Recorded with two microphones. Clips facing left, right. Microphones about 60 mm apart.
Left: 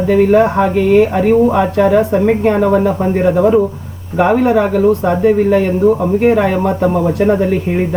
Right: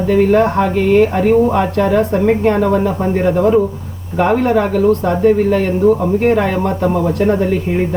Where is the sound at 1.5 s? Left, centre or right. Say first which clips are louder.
Left 3 dB; centre.